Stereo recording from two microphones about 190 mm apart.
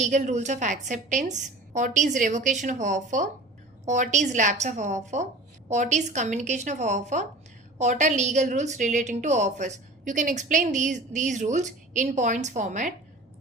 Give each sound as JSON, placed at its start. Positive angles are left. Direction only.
{"t": 0.0, "sound": "a woman's voice", "side_deg": -40}